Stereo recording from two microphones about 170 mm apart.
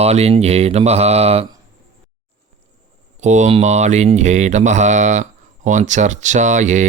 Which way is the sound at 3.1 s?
45° right (ahead or behind).